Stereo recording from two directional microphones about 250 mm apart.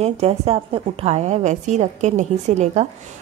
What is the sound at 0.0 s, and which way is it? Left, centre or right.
A woman's voice, right.